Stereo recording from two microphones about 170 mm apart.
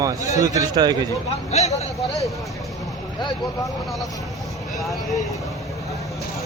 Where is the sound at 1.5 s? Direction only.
40° left (ahead or behind).